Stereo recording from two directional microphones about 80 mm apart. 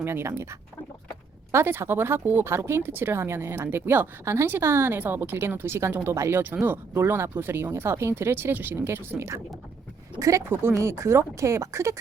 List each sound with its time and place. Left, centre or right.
0.0 s speech: right
1.5 s speech: right
10.5 s speech: right